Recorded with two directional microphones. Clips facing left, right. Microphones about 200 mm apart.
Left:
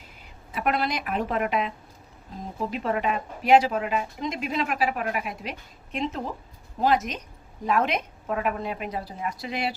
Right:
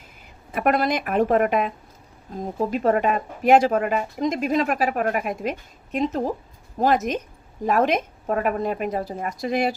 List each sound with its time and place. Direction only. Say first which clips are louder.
0.5 s speech: right 5 dB; 50° right (ahead or behind)